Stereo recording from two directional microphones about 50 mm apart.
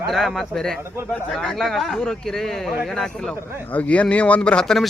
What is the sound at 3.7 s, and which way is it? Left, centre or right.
Speech, left.